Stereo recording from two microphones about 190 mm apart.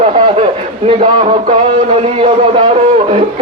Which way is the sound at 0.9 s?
30° right (ahead or behind).